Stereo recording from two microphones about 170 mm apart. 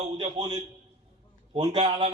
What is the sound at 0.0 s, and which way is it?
Speech, 25° right (ahead or behind).